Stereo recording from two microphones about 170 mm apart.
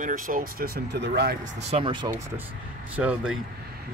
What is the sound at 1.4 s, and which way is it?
Speech, 35° right (ahead or behind).